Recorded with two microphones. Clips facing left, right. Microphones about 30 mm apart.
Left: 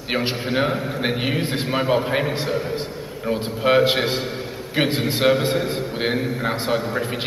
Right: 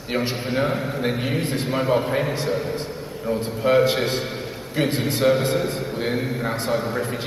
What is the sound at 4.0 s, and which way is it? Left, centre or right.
Speech, centre.